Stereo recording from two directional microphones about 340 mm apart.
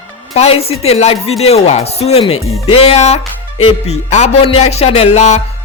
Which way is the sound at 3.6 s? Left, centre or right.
Centre.